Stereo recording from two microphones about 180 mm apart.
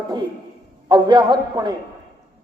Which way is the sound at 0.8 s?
25° right (ahead or behind).